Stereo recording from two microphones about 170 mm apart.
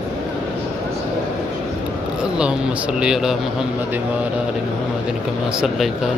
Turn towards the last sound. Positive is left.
turn(degrees=0)  # may be behind; listen again after turning